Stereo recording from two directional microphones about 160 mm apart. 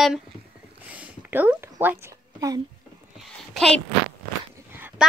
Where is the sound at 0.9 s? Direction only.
10° right (ahead or behind).